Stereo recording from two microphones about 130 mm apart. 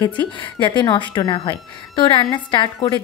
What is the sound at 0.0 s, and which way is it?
A woman's voice, 35° left (ahead or behind).